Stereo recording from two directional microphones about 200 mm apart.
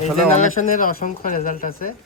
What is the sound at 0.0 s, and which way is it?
Speech, 40° left (ahead or behind).